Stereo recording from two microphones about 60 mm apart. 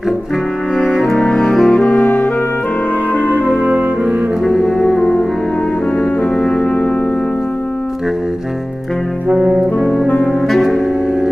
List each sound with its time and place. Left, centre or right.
1.3 s music: centre
1.9 s music: left
3.2 s music: right
3.6 s cello: right
4.7 s music: centre
9.5 s music: centre
10.0 s saxophone: left
10.5 s music: centre